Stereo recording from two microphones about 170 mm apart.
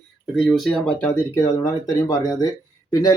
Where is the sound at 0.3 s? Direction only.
Centre (ahead or behind).